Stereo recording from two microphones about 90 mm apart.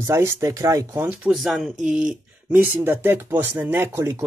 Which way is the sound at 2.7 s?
25° right (ahead or behind).